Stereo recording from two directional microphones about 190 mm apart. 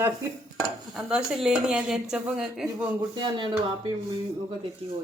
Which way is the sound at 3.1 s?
25° right (ahead or behind).